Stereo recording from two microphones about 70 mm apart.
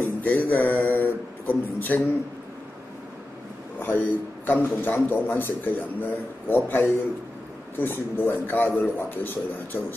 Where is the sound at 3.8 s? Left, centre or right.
Left.